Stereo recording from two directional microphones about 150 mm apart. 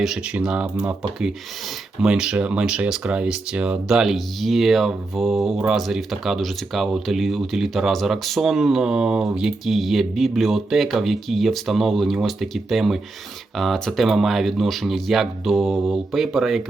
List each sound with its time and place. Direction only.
0.0 s speech: 5° right (ahead or behind)